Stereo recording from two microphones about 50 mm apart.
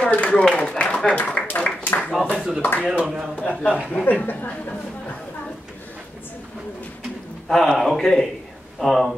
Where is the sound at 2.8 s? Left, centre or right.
Centre.